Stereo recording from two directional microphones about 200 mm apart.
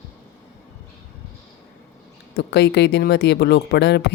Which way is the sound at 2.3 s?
60° left (ahead or behind).